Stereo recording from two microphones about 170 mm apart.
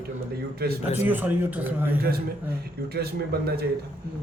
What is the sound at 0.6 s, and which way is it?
Speech, 65° right (ahead or behind).